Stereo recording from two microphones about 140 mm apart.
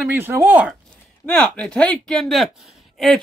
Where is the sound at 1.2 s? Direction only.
5° left (ahead or behind).